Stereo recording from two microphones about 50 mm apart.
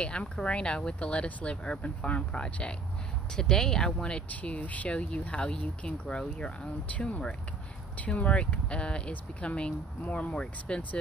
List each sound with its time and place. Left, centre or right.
0.0 s speech: left